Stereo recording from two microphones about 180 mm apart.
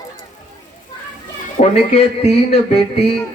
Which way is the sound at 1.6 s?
35° left (ahead or behind).